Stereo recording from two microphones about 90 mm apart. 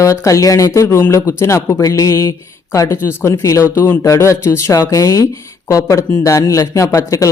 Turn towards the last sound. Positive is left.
turn(degrees=35)  # may be behind; listen again after turning